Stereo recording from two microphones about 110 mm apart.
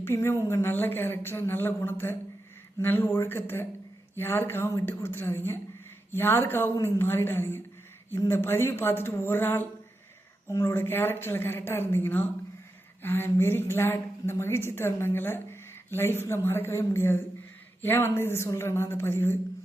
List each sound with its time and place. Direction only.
0.0 s a woman's voice: 20° left (ahead or behind)